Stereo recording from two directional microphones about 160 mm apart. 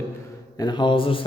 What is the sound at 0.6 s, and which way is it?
Speech, 25° left (ahead or behind).